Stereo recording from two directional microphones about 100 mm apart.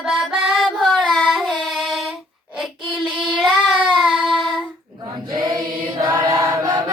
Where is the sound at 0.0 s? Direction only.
Centre (ahead or behind).